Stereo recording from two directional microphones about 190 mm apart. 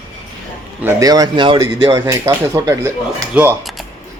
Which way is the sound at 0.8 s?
15° right (ahead or behind).